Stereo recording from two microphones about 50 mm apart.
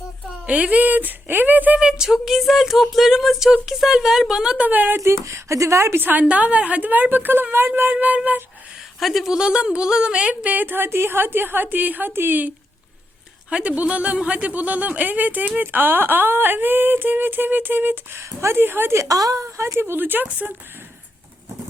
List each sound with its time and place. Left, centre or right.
0.4 s a sound: right
0.8 s speech: right
1.8 s a woman's voice: centre
2.0 s a woman's voice: centre
4.5 s speech: right
4.9 s a woman's voice: right
6.2 s speech: right
7.9 s a sound: right
9.0 s speech: centre
9.3 s speech: centre; by 12.5 s right
13.5 s speech: right
18.9 s a woman's voice: right
19.8 s speech: right